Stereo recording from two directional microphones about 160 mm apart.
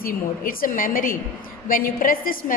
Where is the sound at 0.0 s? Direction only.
65° left (ahead or behind).